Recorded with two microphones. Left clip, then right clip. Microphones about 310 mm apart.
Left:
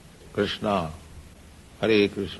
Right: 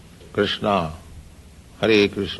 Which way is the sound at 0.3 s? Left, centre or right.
Right.